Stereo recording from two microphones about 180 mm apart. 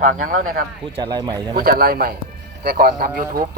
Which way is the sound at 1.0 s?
25° right (ahead or behind).